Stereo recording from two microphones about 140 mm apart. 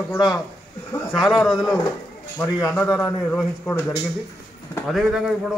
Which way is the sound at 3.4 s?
20° left (ahead or behind).